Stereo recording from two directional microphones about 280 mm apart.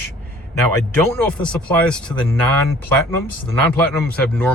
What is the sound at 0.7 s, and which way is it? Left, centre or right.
A man's voice, centre.